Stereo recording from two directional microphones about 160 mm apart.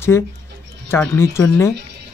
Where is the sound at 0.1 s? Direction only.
15° left (ahead or behind).